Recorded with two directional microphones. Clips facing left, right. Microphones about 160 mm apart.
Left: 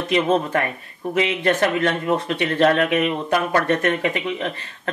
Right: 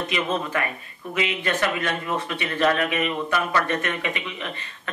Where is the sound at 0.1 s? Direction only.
45° left (ahead or behind).